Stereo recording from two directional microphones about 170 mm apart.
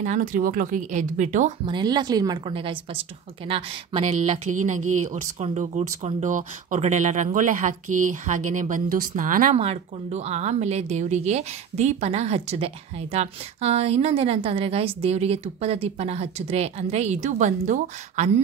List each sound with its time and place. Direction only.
0.0 s speech: 50° right (ahead or behind)
1.7 s a woman's voice: 25° right (ahead or behind)
4.5 s speech: 45° right (ahead or behind)
9.6 s a woman's voice: 40° right (ahead or behind)